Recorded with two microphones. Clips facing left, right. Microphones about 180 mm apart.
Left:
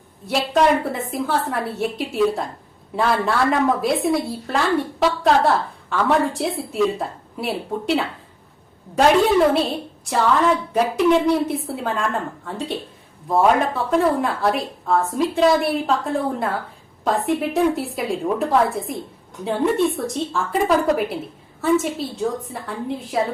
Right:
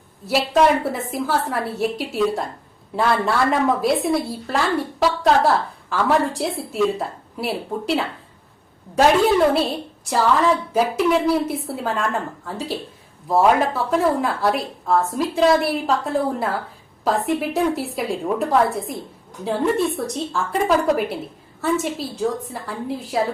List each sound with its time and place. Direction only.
0.3 s a woman's voice: centre (ahead or behind)